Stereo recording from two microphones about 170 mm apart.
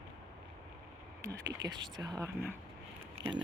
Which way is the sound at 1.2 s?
20° right (ahead or behind).